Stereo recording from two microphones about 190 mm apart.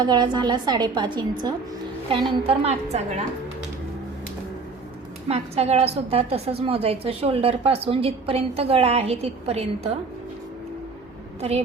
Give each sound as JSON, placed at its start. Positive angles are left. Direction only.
{"t": 0.0, "sound": "a woman's voice", "side_deg": -20}
{"t": 5.3, "sound": "a woman's voice", "side_deg": -35}
{"t": 11.3, "sound": "a woman's voice", "side_deg": -35}